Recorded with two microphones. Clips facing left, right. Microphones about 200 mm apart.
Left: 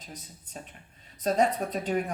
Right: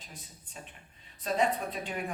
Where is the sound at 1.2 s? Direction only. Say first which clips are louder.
Left 4 dB; 40° left (ahead or behind).